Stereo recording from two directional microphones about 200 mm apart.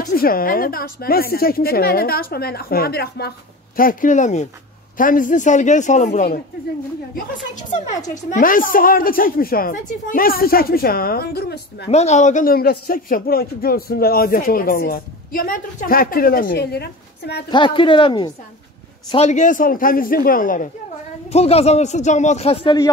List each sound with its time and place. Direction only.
0.0 s a man's voice: 45° left (ahead or behind)
8.1 s a man's voice: 40° left (ahead or behind)
11.9 s a man's voice: 35° left (ahead or behind); by 17.5 s 55° left (ahead or behind)
17.5 s a woman's voice: 25° left (ahead or behind); by 20.7 s 40° left (ahead or behind)
21.3 s a man's voice: 30° left (ahead or behind)